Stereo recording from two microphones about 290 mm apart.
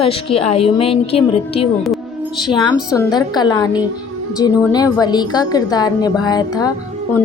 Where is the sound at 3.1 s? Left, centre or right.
Centre.